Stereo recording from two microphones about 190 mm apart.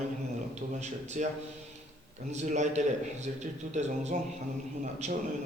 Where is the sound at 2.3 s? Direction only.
40° right (ahead or behind).